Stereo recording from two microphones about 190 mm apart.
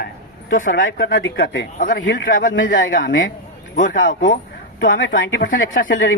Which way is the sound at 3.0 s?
90° left.